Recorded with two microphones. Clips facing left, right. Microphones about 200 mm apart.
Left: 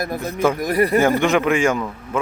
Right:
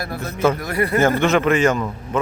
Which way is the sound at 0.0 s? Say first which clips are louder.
Even; 15° left (ahead or behind).